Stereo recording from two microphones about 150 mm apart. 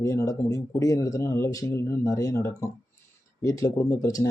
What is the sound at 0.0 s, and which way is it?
Speech, 20° left (ahead or behind).